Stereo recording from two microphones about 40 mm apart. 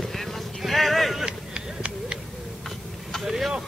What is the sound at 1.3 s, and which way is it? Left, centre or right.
Run, right.